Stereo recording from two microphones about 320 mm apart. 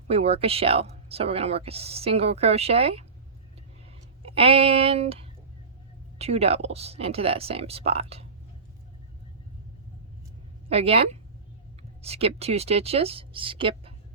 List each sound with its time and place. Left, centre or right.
0.1 s speech: centre
4.3 s speech: centre
10.7 s speech: centre